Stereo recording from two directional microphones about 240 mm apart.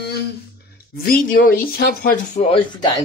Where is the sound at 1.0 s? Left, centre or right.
Left.